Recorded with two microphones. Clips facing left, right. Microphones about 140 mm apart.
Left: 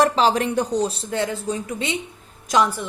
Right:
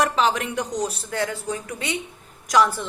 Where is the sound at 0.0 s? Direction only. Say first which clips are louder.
Left 4 dB; 30° left (ahead or behind).